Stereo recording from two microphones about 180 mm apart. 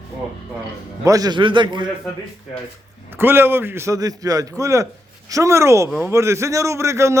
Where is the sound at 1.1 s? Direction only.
20° right (ahead or behind).